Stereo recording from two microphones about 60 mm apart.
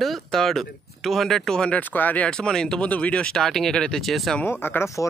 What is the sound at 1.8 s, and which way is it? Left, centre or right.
Speech, left.